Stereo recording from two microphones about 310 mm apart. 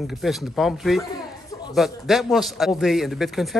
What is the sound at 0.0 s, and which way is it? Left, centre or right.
A man's voice, centre.